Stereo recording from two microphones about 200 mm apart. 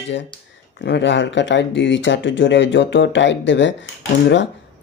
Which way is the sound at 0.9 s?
60° left (ahead or behind).